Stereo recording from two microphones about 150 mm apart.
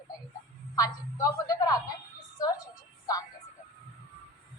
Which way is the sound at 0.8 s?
25° left (ahead or behind).